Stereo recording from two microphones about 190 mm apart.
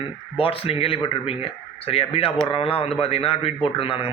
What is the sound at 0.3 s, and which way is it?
Speech, 30° left (ahead or behind).